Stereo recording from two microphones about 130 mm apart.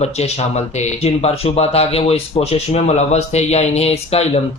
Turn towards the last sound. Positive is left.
turn(degrees=50)  # may be behind; listen again after turning